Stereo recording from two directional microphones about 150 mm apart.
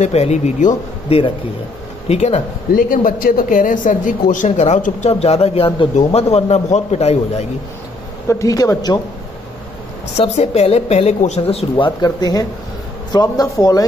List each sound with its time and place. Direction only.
0.0 s a woman's voice: 45° left (ahead or behind)
2.7 s a woman's voice: 65° left (ahead or behind); by 7.4 s 45° left (ahead or behind)
8.3 s speech: 20° left (ahead or behind)
10.1 s a woman's voice: 45° left (ahead or behind)
11.7 s speech: 25° left (ahead or behind)